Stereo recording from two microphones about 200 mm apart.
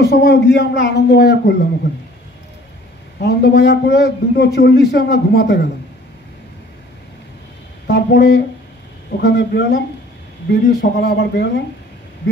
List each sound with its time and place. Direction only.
0.0 s a man's voice: 55° left (ahead or behind)
3.2 s a man's voice: 60° left (ahead or behind)
7.8 s a man's voice: 55° left (ahead or behind)